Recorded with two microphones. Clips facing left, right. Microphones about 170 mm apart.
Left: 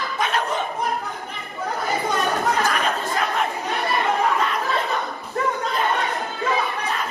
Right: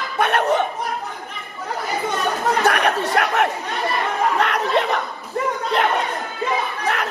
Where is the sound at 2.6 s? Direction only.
70° right (ahead or behind).